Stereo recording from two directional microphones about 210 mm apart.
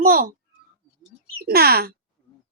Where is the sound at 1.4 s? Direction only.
45° right (ahead or behind).